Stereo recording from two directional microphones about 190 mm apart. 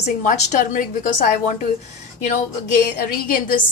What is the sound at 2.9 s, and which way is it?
Speech, 50° left (ahead or behind).